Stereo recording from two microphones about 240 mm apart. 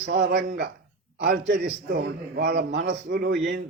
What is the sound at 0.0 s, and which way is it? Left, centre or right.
A man's voice, right.